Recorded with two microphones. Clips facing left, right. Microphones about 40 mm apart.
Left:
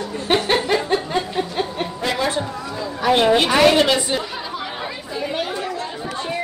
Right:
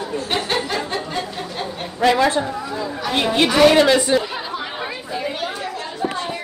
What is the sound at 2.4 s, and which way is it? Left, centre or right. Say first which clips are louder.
Speech: right 2 dB; centre.